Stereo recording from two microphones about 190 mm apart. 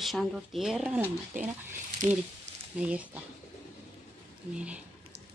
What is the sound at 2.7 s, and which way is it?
Speech, 5° right (ahead or behind).